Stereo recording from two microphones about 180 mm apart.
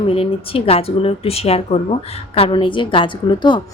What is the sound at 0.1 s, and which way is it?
A woman's voice, 30° left (ahead or behind).